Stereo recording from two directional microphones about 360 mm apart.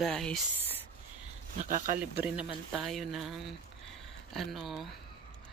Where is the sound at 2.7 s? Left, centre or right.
Centre.